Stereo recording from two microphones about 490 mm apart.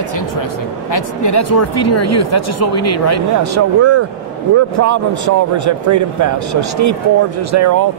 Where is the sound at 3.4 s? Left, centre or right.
Right.